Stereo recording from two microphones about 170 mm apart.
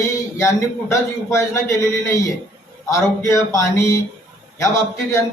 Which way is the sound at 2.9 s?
20° left (ahead or behind).